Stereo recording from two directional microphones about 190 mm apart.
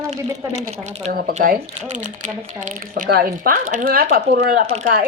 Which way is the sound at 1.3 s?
40° right (ahead or behind).